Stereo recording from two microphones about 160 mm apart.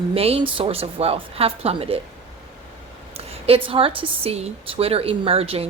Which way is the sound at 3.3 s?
35° right (ahead or behind).